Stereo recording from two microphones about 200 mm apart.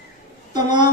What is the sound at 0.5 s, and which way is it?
Speech, 20° right (ahead or behind).